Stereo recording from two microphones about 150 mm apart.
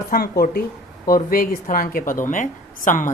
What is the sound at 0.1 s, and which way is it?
Speech, 75° left (ahead or behind).